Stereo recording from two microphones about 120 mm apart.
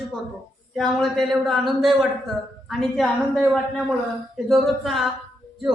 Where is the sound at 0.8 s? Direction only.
Centre (ahead or behind).